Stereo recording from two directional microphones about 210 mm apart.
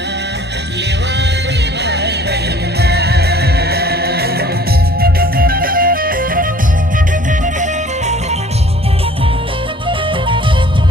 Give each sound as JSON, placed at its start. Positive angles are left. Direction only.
{"t": 1.8, "sound": "music", "side_deg": -55}